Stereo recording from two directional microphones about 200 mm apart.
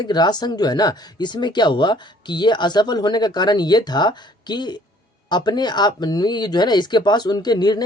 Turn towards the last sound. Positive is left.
turn(degrees=20)  # may be behind; listen again after turning